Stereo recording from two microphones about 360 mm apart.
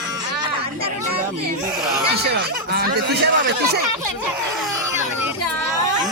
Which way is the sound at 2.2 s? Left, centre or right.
Right.